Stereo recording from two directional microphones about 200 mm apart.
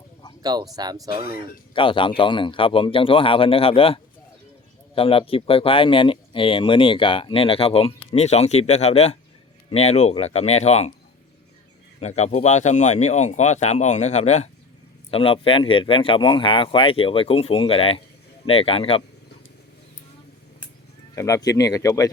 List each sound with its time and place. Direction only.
0.4 s speech: 20° right (ahead or behind)
1.7 s speech: 25° left (ahead or behind)
11.9 s a man's voice: 35° left (ahead or behind)
21.2 s speech: 15° left (ahead or behind)